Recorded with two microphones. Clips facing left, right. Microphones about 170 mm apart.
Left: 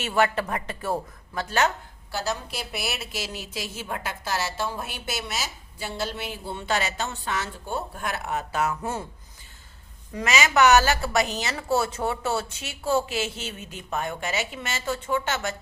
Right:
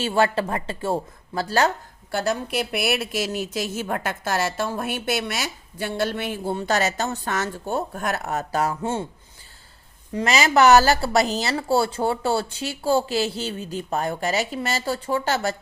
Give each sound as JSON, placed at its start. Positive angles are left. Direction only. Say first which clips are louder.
{"t": 0.0, "sound": "a woman's voice", "louder": "right 3 dB", "side_deg": -30}
{"t": 2.1, "sound": "a woman's voice", "louder": "right 6 dB", "side_deg": -55}
{"t": 10.2, "sound": "a woman's voice", "louder": "right 3 dB", "side_deg": -35}